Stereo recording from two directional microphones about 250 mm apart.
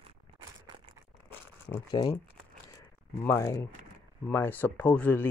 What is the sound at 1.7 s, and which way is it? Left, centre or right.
Crumpling, centre.